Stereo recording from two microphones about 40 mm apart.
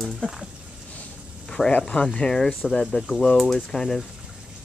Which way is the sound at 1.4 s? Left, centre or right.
Centre.